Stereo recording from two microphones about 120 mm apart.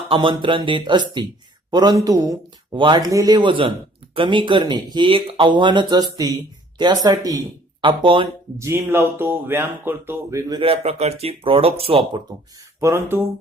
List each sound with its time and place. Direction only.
0.1 s speech: 45° right (ahead or behind)
2.7 s speech: 45° right (ahead or behind)
3.0 s speech: 30° right (ahead or behind)
7.8 s speech: 45° right (ahead or behind)
8.5 s speech: 20° right (ahead or behind)
10.6 s speech: 55° right (ahead or behind)
12.8 s speech: 20° right (ahead or behind)